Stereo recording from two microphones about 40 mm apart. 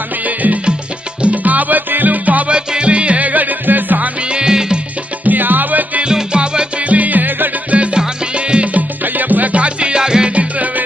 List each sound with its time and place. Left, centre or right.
1.2 s music: right
2.4 s music: right
4.3 s music: centre
5.2 s music: right
6.0 s music: right
6.9 s music: right
7.7 s music: right
9.0 s music: right; by 10.3 s centre